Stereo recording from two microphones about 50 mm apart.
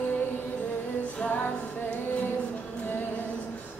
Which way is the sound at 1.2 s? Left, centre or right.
Left.